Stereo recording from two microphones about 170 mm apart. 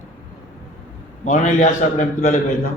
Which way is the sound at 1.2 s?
45° left (ahead or behind).